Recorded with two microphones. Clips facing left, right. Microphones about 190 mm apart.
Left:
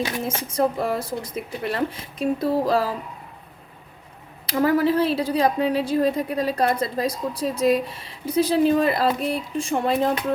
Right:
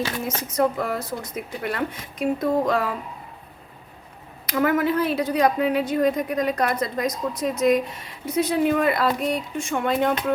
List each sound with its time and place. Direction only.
0.3 s a woman's voice: 30° left (ahead or behind)
4.4 s a woman's voice: 30° left (ahead or behind)